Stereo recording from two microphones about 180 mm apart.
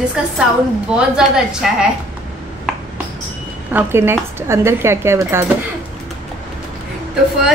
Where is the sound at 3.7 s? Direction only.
15° right (ahead or behind).